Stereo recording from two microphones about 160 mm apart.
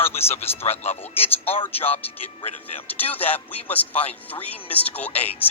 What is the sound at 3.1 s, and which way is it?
Speech, 10° left (ahead or behind).